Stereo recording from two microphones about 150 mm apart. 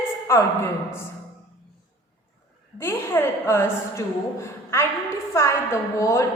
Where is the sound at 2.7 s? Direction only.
15° left (ahead or behind).